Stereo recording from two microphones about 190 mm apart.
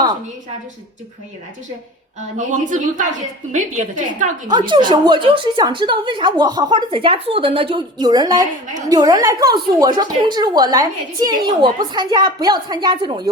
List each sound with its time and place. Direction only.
2.5 s a woman's voice: 40° right (ahead or behind)
4.4 s a woman's voice: 25° right (ahead or behind)